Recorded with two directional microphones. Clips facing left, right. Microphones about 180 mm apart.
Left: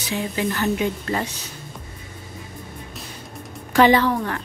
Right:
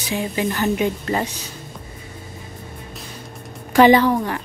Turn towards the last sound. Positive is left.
turn(degrees=-15)  # may be behind; listen again after turning